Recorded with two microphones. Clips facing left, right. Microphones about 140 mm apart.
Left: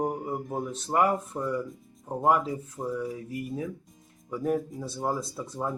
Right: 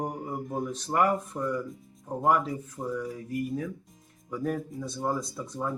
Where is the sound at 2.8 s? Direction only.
20° left (ahead or behind).